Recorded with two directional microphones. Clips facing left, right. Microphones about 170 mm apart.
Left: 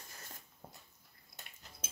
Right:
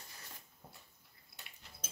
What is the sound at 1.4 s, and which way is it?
Bathtub, 45° left (ahead or behind).